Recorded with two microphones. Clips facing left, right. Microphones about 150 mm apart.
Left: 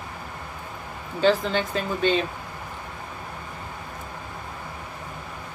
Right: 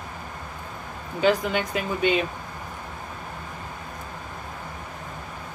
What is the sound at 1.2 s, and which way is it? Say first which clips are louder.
A woman's voice: left 1 dB; 10° right (ahead or behind).